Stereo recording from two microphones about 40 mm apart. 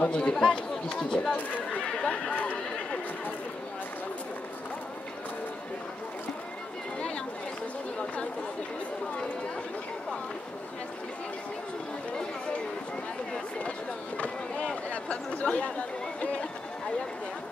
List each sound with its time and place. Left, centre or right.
0.0 s speech: left
0.4 s speech: centre
13.6 s a sound: left
14.9 s speech: left